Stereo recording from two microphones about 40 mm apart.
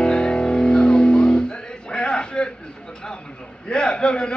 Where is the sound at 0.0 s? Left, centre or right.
Left.